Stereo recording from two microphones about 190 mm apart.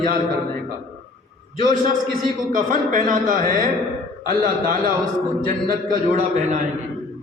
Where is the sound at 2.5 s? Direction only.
45° right (ahead or behind).